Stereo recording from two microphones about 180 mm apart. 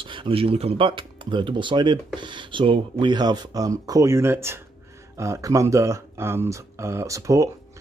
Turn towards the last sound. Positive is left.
turn(degrees=-15)  # may be behind; listen again after turning